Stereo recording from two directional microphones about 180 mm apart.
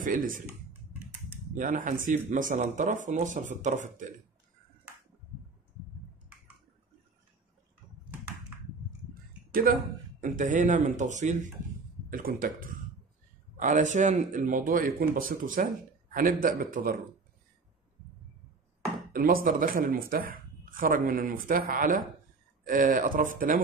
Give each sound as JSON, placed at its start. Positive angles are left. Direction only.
{"t": 0.0, "sound": "speech", "side_deg": -50}
{"t": 1.5, "sound": "speech", "side_deg": -45}
{"t": 9.5, "sound": "speech", "side_deg": -55}
{"t": 19.1, "sound": "speech", "side_deg": -50}